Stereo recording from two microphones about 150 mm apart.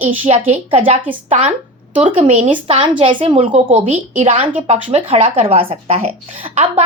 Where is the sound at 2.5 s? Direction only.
35° right (ahead or behind).